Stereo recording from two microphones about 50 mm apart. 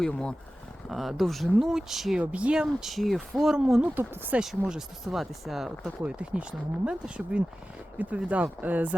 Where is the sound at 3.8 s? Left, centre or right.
Right.